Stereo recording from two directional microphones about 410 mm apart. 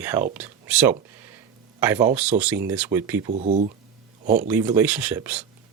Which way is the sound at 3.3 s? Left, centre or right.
Centre.